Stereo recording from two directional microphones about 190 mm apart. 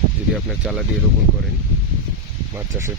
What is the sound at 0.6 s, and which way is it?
Speech, centre (ahead or behind).